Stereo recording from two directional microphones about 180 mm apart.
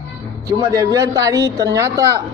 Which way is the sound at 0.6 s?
20° right (ahead or behind).